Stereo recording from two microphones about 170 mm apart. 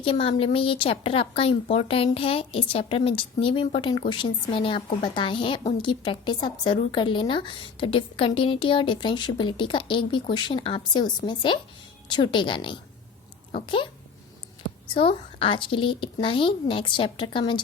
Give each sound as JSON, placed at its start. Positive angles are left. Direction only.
{"t": 0.0, "sound": "a woman's voice", "side_deg": 35}
{"t": 14.9, "sound": "a woman's voice", "side_deg": 30}